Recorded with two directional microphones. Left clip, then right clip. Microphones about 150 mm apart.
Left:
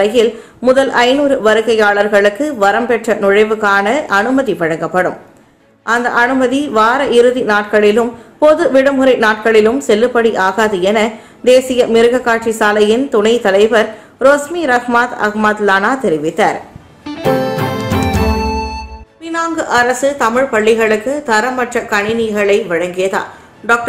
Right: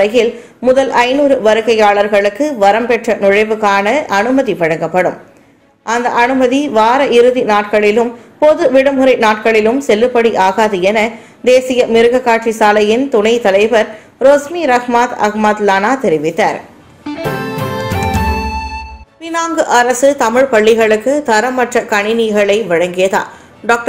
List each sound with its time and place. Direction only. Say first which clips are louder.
0.0 s a woman's voice: even; 5° right (ahead or behind)
17.0 s music: left 4 dB; centre (ahead or behind)
19.3 s a woman's voice: right 2 dB; 15° right (ahead or behind)